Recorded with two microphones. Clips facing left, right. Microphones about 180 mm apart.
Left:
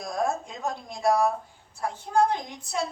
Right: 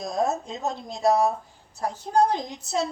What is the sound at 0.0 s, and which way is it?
Speech, 20° right (ahead or behind).